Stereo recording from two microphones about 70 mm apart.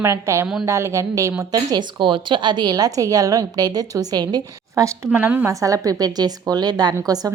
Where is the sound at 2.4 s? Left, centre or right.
Right.